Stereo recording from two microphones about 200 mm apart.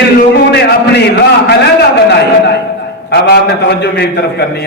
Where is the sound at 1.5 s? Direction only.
55° left (ahead or behind).